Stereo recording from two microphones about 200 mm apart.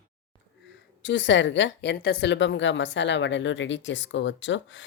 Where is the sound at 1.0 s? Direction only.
65° left (ahead or behind).